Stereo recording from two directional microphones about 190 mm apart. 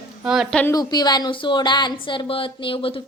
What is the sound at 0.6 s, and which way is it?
A woman's voice, 15° left (ahead or behind).